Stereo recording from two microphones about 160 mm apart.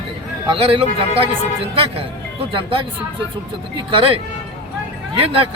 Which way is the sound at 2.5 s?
30° right (ahead or behind).